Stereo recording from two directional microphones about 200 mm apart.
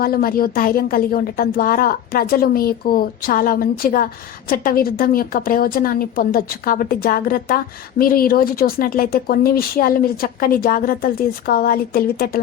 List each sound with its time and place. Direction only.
0.0 s a woman's voice: 50° left (ahead or behind)